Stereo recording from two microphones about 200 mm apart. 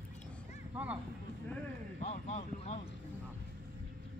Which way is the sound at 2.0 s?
30° left (ahead or behind).